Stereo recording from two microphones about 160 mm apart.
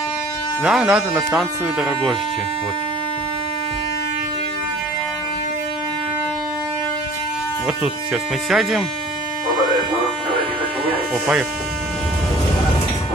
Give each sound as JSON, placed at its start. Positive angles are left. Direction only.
{"t": 0.7, "sound": "speech", "side_deg": -5}
{"t": 7.6, "sound": "speech", "side_deg": -5}